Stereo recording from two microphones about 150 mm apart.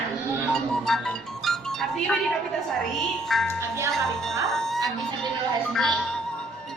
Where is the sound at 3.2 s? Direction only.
Centre (ahead or behind).